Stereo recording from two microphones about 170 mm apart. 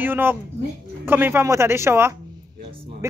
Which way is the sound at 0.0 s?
10° right (ahead or behind).